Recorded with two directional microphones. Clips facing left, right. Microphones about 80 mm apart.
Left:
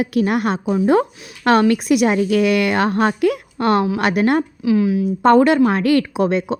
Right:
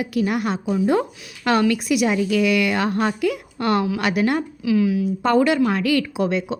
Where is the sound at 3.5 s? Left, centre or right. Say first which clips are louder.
Left 3 dB; left.